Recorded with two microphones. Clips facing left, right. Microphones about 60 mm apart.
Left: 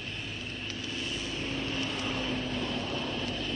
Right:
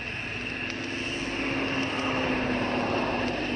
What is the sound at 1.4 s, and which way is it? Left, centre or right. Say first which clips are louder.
Vehicle: right 6 dB; right.